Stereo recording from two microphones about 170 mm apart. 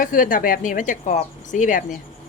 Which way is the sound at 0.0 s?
50° left (ahead or behind).